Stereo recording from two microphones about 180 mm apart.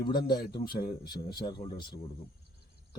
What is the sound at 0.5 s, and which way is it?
A man's voice, 25° left (ahead or behind).